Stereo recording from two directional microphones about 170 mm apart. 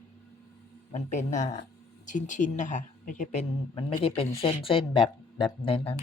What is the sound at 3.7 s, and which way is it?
Speech, 30° left (ahead or behind).